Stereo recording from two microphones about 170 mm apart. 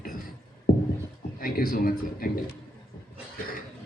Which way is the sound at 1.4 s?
60° left (ahead or behind).